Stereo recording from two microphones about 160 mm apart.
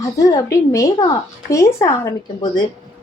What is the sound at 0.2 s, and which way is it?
A woman's voice, 20° left (ahead or behind).